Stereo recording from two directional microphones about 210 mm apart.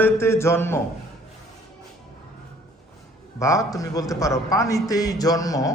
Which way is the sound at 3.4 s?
15° left (ahead or behind).